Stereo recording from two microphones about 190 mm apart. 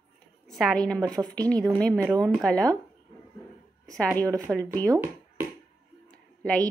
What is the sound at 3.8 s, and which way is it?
Speech, 5° left (ahead or behind).